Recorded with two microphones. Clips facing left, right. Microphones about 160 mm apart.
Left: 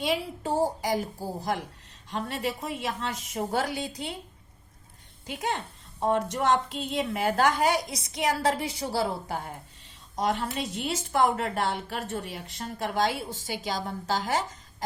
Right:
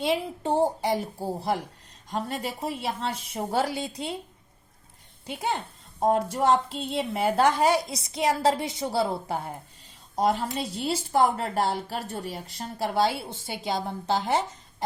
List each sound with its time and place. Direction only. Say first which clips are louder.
0.0 s a woman's voice: right 2 dB; 25° right (ahead or behind)
5.2 s a woman's voice: right 1 dB; 30° right (ahead or behind)